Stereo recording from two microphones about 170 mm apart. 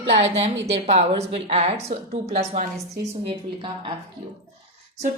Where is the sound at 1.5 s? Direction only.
40° right (ahead or behind).